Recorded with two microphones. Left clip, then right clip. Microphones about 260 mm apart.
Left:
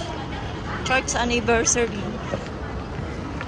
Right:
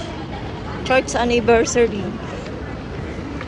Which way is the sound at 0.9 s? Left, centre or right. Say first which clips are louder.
Right 5 dB; centre.